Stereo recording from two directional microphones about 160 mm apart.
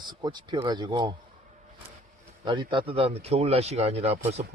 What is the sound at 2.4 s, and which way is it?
Speech, 30° right (ahead or behind).